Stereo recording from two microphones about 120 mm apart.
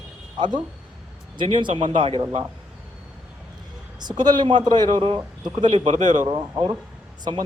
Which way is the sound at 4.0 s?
35° right (ahead or behind).